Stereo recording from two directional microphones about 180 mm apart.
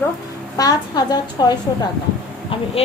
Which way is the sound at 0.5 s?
20° left (ahead or behind).